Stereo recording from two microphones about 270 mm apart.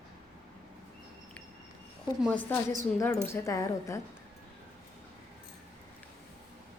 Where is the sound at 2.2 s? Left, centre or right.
Centre.